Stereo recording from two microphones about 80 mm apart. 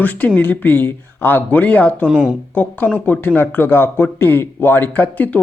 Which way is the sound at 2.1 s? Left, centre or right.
Centre.